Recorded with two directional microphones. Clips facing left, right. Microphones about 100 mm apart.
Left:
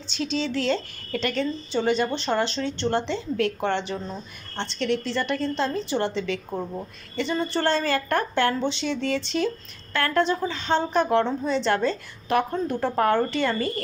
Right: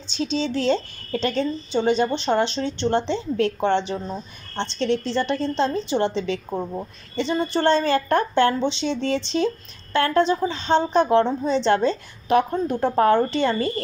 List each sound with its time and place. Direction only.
0.2 s a woman's voice: 20° right (ahead or behind)